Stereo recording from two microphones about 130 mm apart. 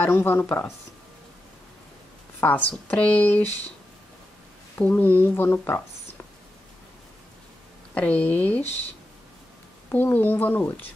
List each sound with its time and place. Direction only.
0.0 s speech: 15° left (ahead or behind)
2.4 s speech: 10° left (ahead or behind)
4.7 s speech: 15° left (ahead or behind)
7.9 s speech: 10° left (ahead or behind)
9.8 s speech: 15° left (ahead or behind)